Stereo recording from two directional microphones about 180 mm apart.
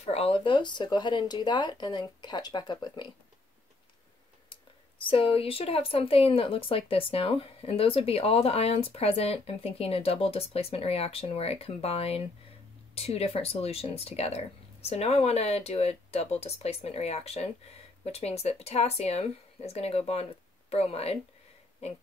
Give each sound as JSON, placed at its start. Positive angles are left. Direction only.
{"t": 0.0, "sound": "speech", "side_deg": 35}
{"t": 5.0, "sound": "a woman's voice", "side_deg": 30}